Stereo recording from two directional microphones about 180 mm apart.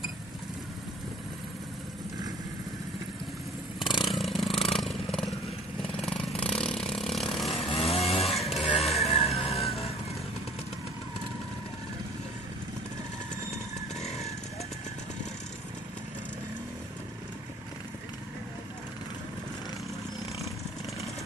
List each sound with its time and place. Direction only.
3.8 s chainsaw: 25° left (ahead or behind)
4.1 s vehicle: centre (ahead or behind)
7.6 s chainsaw: 35° left (ahead or behind)
8.8 s vehicle: centre (ahead or behind)
9.1 s music: 35° left (ahead or behind)